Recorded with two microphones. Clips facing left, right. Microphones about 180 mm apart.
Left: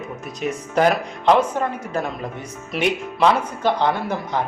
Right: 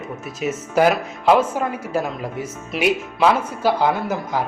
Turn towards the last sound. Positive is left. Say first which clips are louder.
# right 1 dB
turn(degrees=-5)  # may be behind; listen again after turning